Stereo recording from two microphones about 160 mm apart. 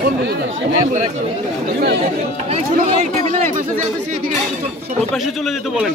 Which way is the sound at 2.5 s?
45° right (ahead or behind).